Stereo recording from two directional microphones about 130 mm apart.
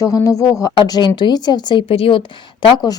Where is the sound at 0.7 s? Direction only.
35° left (ahead or behind).